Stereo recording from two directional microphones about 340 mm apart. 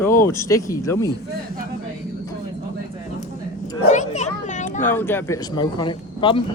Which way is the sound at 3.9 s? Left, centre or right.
Left.